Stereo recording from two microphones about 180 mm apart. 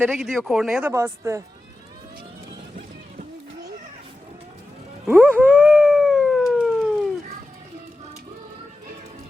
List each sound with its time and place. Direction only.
0.0 s speech: 5° right (ahead or behind)
5.0 s howl: 10° right (ahead or behind)